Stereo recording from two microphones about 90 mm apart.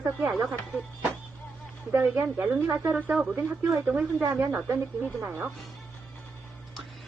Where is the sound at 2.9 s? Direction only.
10° right (ahead or behind).